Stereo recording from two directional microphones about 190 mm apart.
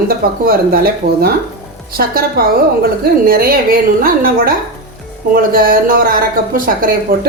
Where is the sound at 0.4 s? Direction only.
50° right (ahead or behind).